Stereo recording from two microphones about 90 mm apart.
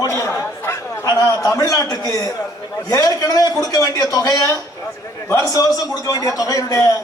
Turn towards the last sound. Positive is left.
turn(degrees=35)  # may be behind; listen again after turning